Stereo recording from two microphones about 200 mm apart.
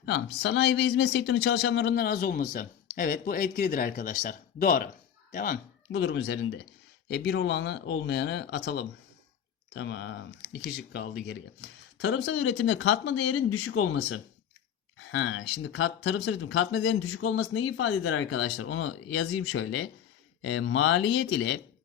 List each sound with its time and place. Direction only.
0.0 s speech: 60° left (ahead or behind); by 5.5 s 40° left (ahead or behind)
5.9 s speech: 60° left (ahead or behind); by 14.2 s 85° left
14.9 s speech: 70° left (ahead or behind)